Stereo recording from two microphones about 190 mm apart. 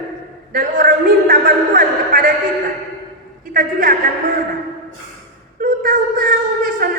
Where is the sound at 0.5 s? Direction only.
45° right (ahead or behind).